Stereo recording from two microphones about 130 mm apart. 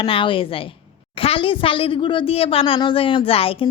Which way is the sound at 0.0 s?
40° left (ahead or behind).